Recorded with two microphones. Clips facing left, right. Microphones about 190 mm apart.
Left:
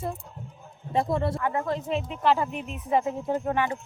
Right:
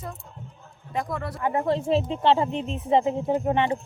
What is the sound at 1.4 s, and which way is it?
Speech, 20° right (ahead or behind).